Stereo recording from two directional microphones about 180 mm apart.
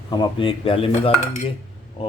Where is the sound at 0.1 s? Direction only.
25° left (ahead or behind).